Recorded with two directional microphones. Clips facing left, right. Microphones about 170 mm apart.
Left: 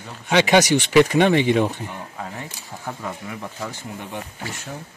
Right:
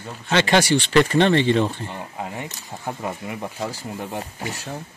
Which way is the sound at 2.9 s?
20° right (ahead or behind).